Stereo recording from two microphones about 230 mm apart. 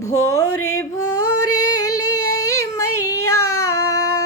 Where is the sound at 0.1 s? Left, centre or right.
Left.